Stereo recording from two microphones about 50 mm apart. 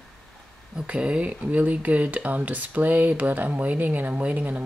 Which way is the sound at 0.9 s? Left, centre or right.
Right.